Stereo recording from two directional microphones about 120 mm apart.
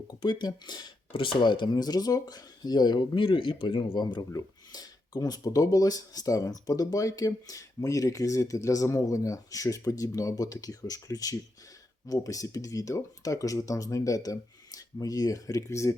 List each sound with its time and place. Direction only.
0.2 s speech: 40° left (ahead or behind)